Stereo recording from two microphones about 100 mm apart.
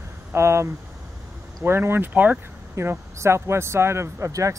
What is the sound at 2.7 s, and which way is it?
Speech, 25° right (ahead or behind).